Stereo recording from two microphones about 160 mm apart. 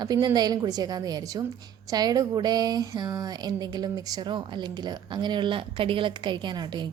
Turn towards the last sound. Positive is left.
turn(degrees=-25)  # may be behind; listen again after turning